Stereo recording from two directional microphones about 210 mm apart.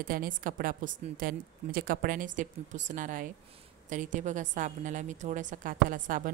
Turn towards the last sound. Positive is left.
turn(degrees=-40)  # may be behind; listen again after turning